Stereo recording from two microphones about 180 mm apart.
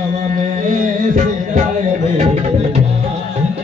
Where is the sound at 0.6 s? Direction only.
45° right (ahead or behind).